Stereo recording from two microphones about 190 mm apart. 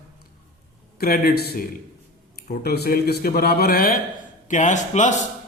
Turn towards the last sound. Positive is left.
turn(degrees=40)  # may be behind; listen again after turning